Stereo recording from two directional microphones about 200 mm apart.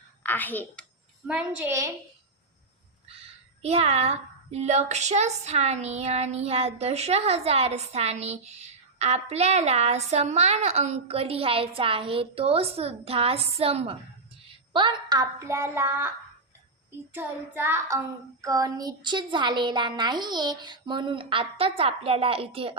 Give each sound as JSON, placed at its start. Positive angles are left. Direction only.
{"t": 0.2, "sound": "a woman's voice", "side_deg": 10}
{"t": 1.3, "sound": "a woman's voice", "side_deg": -5}
{"t": 3.6, "sound": "child singing", "side_deg": -30}
{"t": 14.7, "sound": "a woman's voice", "side_deg": -25}